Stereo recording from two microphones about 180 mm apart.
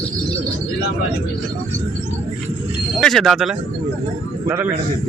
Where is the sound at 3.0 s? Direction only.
Centre (ahead or behind).